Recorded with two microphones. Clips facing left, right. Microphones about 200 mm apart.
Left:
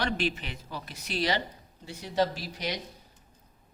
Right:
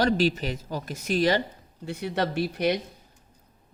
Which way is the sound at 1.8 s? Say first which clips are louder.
Right 1 dB; 65° right (ahead or behind).